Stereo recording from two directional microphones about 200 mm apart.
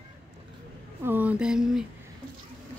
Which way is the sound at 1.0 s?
10° right (ahead or behind).